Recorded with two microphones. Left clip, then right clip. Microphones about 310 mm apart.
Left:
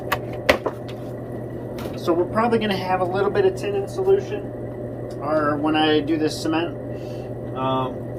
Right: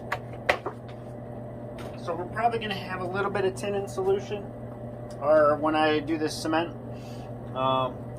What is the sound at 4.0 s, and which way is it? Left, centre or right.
Speech, right.